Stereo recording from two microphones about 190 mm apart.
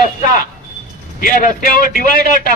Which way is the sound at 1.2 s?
45° left (ahead or behind).